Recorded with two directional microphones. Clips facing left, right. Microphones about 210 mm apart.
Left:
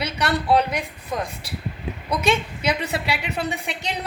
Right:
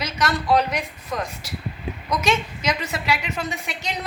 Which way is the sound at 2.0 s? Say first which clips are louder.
Left 1 dB; 30° left (ahead or behind).